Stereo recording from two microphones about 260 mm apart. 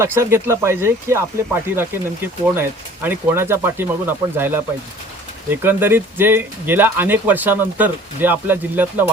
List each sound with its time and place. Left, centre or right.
0.0 s speech: centre